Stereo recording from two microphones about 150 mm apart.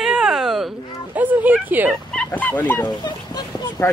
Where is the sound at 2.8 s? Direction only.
25° left (ahead or behind).